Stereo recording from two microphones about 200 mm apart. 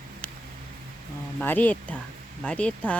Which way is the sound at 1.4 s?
10° left (ahead or behind).